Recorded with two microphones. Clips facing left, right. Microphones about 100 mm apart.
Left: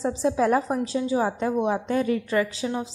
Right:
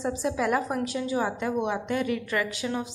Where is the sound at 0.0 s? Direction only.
30° left (ahead or behind).